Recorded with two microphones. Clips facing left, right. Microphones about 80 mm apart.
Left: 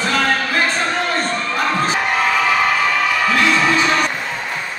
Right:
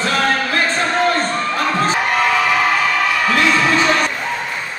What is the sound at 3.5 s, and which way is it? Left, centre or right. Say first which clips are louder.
Music: right 1 dB; centre.